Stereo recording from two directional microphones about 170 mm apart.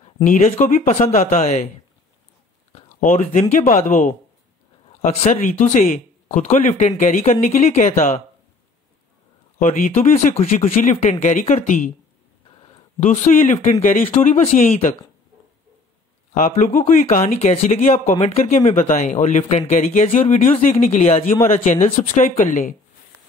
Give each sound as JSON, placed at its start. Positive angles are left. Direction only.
{"t": 0.2, "sound": "speech", "side_deg": 45}
{"t": 3.0, "sound": "speech", "side_deg": 50}
{"t": 9.6, "sound": "speech", "side_deg": 45}
{"t": 10.6, "sound": "speech", "side_deg": 50}
{"t": 13.0, "sound": "speech", "side_deg": 50}
{"t": 16.3, "sound": "speech", "side_deg": 50}